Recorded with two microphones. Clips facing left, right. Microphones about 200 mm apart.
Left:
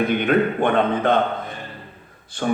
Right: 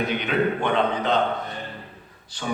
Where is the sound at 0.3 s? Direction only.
55° left (ahead or behind).